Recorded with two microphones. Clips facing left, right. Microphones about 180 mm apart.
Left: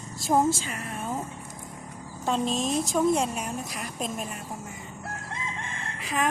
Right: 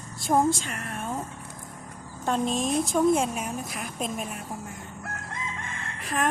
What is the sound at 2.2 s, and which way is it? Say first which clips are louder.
A woman's voice: right 1 dB; centre (ahead or behind).